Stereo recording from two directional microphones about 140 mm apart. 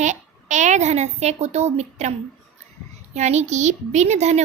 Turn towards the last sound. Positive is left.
turn(degrees=-55)  # may be behind; listen again after turning